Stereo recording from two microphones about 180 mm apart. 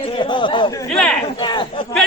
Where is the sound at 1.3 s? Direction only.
25° left (ahead or behind).